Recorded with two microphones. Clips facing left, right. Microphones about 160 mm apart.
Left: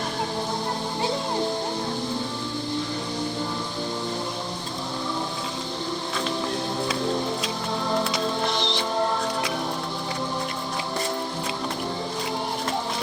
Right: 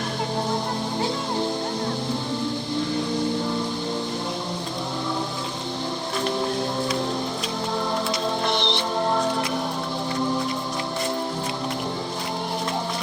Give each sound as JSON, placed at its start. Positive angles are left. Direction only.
{"t": 8.4, "sound": "music", "side_deg": -65}